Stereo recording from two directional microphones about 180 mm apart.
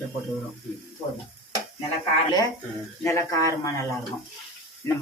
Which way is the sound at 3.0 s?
15° left (ahead or behind).